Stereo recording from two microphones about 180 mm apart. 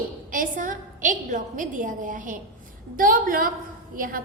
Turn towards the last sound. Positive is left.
turn(degrees=-50)  # may be behind; listen again after turning